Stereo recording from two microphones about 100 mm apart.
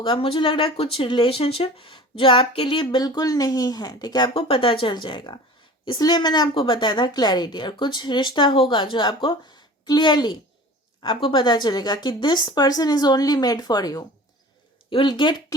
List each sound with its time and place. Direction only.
0.0 s speech: 65° left (ahead or behind)
3.0 s speech: 40° left (ahead or behind)
4.4 s speech: 65° left (ahead or behind); by 14.0 s 40° left (ahead or behind)
14.8 s speech: 55° left (ahead or behind)